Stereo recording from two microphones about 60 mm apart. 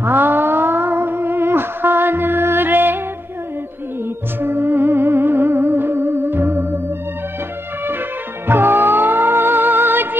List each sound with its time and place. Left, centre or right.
0.0 s music: right
4.4 s music: right
8.5 s music: right